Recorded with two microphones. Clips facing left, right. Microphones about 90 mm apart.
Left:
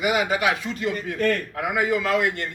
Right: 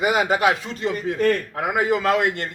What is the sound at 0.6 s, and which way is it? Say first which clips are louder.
A man's voice: right 2 dB; 30° right (ahead or behind).